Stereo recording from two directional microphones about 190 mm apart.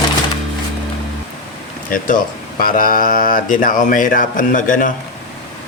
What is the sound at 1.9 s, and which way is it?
Speech, 45° left (ahead or behind).